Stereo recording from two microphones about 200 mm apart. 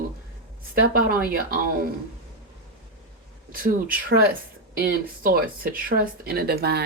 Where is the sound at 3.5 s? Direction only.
45° right (ahead or behind).